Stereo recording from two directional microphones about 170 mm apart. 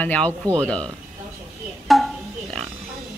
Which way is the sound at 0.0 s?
10° left (ahead or behind).